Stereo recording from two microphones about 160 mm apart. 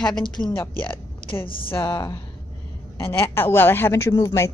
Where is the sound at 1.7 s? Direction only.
35° left (ahead or behind).